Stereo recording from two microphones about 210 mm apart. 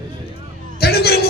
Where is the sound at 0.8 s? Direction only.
50° left (ahead or behind).